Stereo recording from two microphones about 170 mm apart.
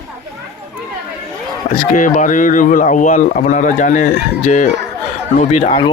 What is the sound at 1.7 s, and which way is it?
A man's voice, 50° left (ahead or behind).